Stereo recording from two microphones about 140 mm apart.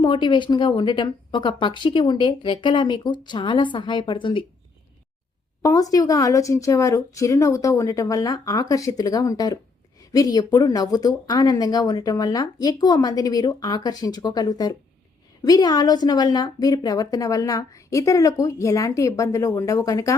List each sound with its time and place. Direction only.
0.0 s speech: 35° left (ahead or behind)
5.6 s a woman's voice: 25° left (ahead or behind)